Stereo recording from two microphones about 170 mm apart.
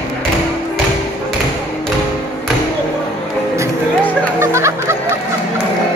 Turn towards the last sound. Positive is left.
turn(degrees=-15)  # may be behind; listen again after turning